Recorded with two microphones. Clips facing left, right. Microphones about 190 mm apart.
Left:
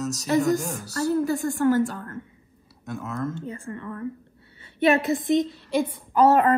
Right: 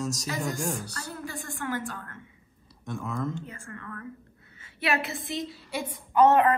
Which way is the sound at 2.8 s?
Centre (ahead or behind).